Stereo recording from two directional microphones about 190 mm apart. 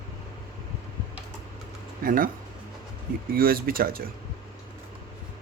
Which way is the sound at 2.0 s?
50° right (ahead or behind).